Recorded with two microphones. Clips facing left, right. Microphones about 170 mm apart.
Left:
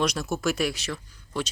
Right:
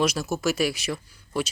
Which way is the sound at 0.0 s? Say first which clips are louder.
Right 2 dB; 5° right (ahead or behind).